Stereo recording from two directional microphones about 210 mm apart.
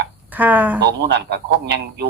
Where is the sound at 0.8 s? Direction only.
55° right (ahead or behind).